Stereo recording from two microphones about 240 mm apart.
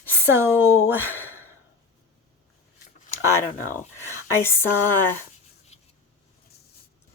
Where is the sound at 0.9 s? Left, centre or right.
Centre.